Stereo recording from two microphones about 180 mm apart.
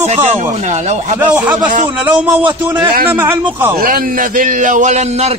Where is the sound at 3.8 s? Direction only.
50° right (ahead or behind).